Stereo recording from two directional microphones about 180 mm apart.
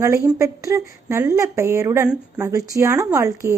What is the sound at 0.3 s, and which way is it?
Speech, 15° right (ahead or behind).